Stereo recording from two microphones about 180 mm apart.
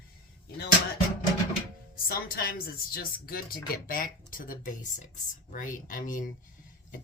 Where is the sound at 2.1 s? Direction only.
55° left (ahead or behind).